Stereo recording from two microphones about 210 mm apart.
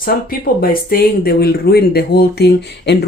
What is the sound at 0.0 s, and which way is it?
Speech, 45° left (ahead or behind).